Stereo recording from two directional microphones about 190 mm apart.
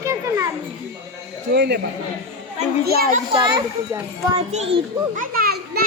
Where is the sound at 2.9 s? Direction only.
55° right (ahead or behind).